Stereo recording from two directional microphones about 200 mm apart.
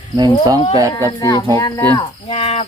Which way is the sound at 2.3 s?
30° left (ahead or behind).